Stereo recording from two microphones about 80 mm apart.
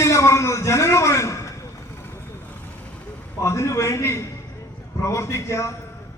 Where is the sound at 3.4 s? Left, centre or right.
Left.